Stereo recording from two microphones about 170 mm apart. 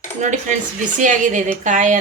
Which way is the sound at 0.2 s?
45° right (ahead or behind).